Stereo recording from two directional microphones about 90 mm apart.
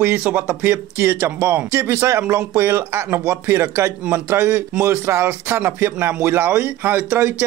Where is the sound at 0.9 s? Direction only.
30° right (ahead or behind).